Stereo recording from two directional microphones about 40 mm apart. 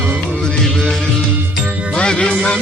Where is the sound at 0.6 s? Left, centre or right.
Centre.